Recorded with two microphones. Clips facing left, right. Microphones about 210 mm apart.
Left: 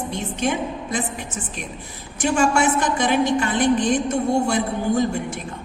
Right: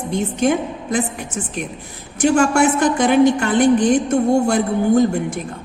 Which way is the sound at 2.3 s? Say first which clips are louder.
Right 2 dB; 50° right (ahead or behind).